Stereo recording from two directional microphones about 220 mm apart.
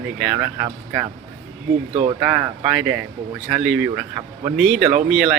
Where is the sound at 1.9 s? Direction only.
25° right (ahead or behind).